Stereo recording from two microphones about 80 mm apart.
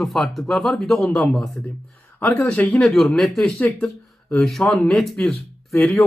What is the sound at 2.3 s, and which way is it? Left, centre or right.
Speech, left.